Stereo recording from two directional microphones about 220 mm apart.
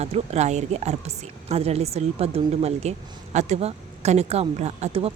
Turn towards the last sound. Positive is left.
turn(degrees=-30)  # may be behind; listen again after turning